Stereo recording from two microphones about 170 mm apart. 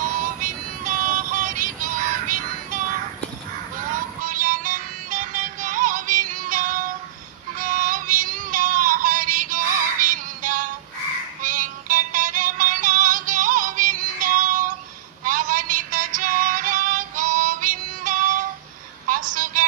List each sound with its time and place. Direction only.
0.0 s music: 50° right (ahead or behind)
3.9 s music: 50° right (ahead or behind)
19.0 s a sound: 50° right (ahead or behind)